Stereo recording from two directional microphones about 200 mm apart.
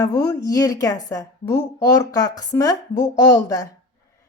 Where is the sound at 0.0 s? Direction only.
20° left (ahead or behind).